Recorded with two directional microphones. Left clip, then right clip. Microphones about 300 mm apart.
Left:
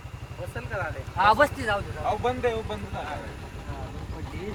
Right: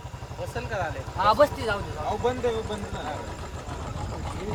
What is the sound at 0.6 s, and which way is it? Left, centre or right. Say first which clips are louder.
Speech: right 2 dB; right.